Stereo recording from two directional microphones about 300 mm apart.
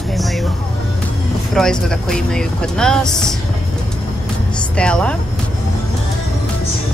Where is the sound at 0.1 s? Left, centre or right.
Centre.